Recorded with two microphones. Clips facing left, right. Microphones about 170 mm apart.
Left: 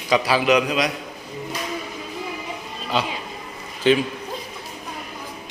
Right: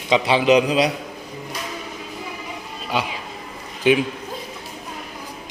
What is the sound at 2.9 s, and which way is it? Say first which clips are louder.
Speech: left 1 dB; 10° right (ahead or behind).